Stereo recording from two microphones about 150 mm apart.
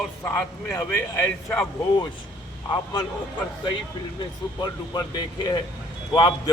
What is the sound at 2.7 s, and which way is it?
Speech, 30° left (ahead or behind).